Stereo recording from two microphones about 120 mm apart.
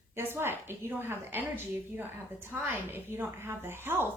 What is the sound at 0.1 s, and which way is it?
A woman's voice, 20° right (ahead or behind).